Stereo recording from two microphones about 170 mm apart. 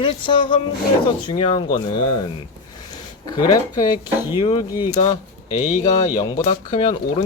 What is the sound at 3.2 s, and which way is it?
Speech, 25° left (ahead or behind).